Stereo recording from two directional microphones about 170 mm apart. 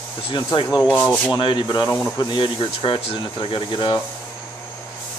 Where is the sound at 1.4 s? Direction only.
30° left (ahead or behind).